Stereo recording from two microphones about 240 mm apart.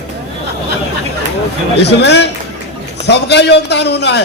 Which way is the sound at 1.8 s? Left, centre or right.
Left.